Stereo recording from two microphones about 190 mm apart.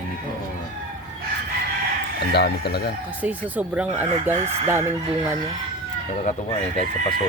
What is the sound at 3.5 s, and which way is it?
Speech, 10° right (ahead or behind).